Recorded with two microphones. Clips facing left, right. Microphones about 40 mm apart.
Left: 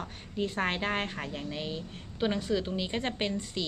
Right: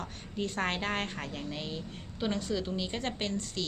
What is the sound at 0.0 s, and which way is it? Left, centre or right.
Speech, centre.